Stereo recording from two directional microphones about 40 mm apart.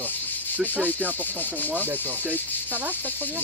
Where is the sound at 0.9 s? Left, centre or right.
Left.